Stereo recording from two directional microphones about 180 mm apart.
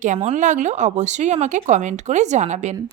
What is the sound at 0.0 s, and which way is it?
Speech, 40° right (ahead or behind).